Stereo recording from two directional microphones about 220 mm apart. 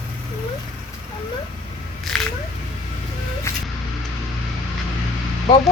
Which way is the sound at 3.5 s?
10° left (ahead or behind).